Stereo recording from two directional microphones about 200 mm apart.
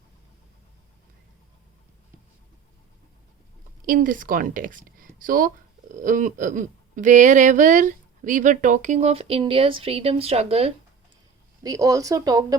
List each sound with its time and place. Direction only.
3.8 s a woman's voice: 45° right (ahead or behind)
5.9 s a sound: 40° right (ahead or behind)
11.6 s speech: 15° right (ahead or behind)